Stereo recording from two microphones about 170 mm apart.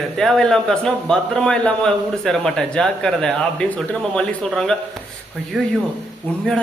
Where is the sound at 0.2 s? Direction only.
5° left (ahead or behind).